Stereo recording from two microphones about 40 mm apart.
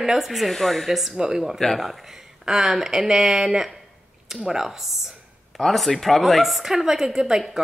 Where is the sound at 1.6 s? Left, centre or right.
Centre.